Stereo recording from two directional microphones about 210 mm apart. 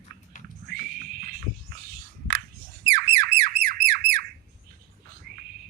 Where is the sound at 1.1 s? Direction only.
45° right (ahead or behind).